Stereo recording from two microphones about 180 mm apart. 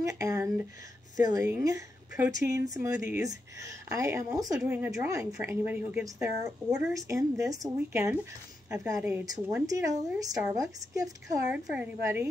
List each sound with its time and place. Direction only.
0.0 s a woman's voice: 15° right (ahead or behind)
11.5 s speech: 10° right (ahead or behind)